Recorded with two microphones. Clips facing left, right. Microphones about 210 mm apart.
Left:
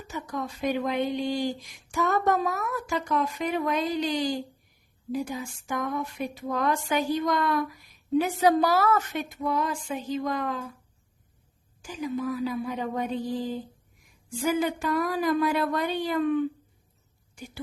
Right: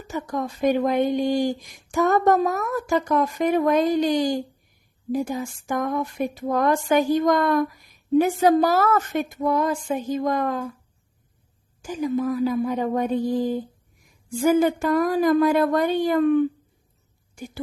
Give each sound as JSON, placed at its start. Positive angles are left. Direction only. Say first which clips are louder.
{"t": 0.1, "sound": "speech", "louder": "right 6 dB", "side_deg": -45}
{"t": 11.8, "sound": "speech", "louder": "right 6 dB", "side_deg": -45}